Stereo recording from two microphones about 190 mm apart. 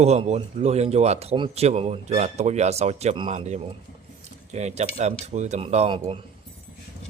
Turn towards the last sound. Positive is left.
turn(degrees=-30)  # may be behind; listen again after turning